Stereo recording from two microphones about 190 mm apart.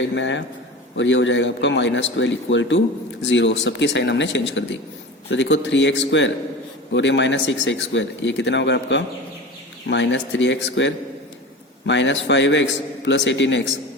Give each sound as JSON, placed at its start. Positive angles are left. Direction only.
{"t": 0.0, "sound": "a man's voice", "side_deg": 70}